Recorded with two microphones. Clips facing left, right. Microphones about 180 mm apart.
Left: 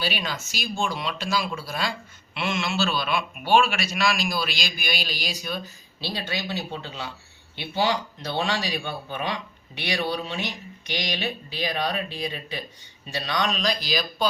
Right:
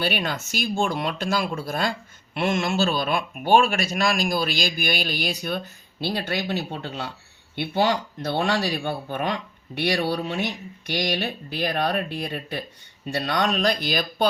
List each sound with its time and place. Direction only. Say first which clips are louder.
0.0 s speech: right 4 dB; 55° right (ahead or behind)